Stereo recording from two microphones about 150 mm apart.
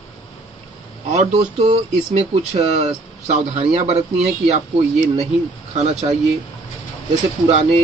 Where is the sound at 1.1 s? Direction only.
50° right (ahead or behind).